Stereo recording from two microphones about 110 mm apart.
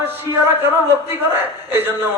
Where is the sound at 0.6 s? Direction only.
20° right (ahead or behind).